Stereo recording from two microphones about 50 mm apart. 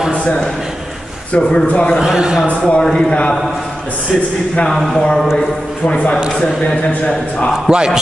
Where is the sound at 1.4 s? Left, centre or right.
Centre.